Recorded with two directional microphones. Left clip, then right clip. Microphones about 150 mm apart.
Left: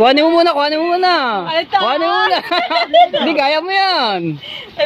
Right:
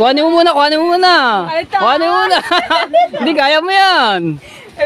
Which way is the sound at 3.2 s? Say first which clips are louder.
Right 3 dB; 55° right (ahead or behind).